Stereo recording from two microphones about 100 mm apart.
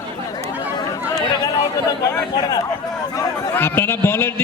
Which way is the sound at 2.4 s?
40° left (ahead or behind).